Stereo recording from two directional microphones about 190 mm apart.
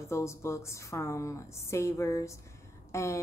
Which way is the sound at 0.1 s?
15° left (ahead or behind).